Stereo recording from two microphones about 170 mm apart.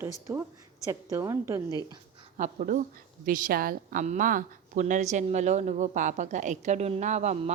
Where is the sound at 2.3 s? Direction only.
45° right (ahead or behind).